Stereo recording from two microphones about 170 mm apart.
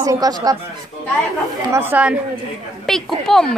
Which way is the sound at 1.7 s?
10° right (ahead or behind).